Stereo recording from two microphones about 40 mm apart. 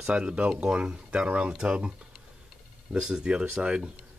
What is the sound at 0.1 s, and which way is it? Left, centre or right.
Speech, right.